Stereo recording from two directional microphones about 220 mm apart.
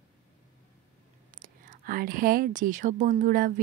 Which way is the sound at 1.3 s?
35° right (ahead or behind).